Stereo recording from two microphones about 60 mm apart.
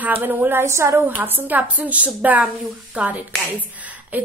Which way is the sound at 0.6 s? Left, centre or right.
Right.